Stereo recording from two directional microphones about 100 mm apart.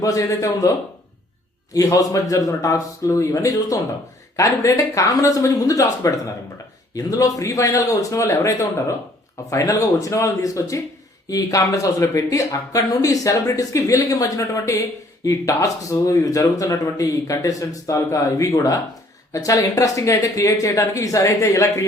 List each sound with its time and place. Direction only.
0.0 s speech: 35° left (ahead or behind)
1.7 s speech: 35° left (ahead or behind)